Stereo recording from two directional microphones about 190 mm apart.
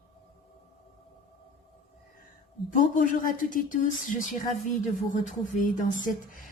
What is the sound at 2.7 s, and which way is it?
A woman's voice, 45° left (ahead or behind).